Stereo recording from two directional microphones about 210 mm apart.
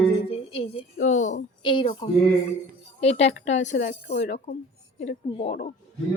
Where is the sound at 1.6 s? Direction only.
20° left (ahead or behind).